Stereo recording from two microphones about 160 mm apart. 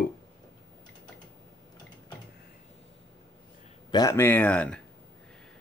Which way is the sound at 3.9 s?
25° left (ahead or behind).